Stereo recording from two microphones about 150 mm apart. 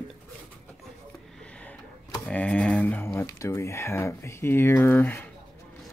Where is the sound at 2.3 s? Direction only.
5° left (ahead or behind).